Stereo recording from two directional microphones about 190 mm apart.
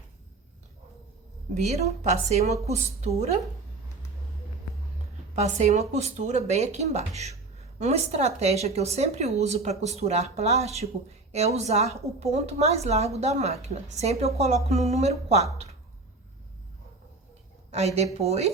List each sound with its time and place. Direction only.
1.6 s a woman's voice: 35° right (ahead or behind)
5.3 s a woman's voice: 35° right (ahead or behind)
17.7 s a woman's voice: 35° right (ahead or behind)